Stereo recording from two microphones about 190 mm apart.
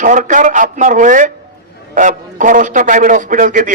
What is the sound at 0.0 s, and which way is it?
A man's voice, 40° right (ahead or behind).